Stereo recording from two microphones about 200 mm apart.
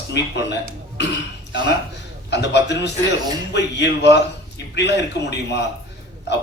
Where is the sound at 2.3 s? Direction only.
60° left (ahead or behind).